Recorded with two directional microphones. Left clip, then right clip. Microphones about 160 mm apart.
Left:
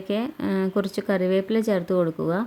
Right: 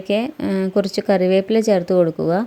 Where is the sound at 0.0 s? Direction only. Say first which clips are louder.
Right 7 dB; 25° right (ahead or behind).